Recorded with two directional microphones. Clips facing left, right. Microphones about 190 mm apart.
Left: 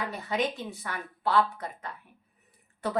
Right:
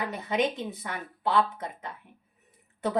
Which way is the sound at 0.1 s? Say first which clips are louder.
Right 2 dB; 20° right (ahead or behind).